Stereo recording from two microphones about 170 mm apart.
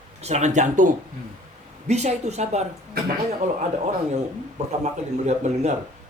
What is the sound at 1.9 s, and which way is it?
A man's voice, 40° right (ahead or behind).